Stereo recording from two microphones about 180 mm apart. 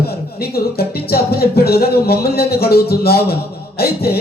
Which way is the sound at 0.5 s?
60° left (ahead or behind).